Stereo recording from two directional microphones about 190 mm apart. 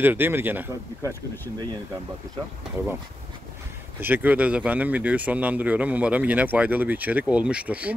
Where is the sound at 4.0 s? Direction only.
10° right (ahead or behind).